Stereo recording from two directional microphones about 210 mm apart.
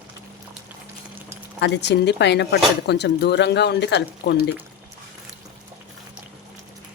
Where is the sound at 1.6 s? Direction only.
55° left (ahead or behind).